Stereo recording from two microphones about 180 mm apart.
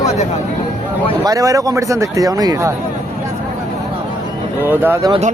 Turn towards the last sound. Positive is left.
turn(degrees=-35)  # may be behind; listen again after turning